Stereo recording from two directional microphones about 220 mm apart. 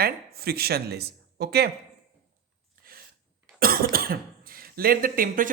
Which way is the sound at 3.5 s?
40° right (ahead or behind).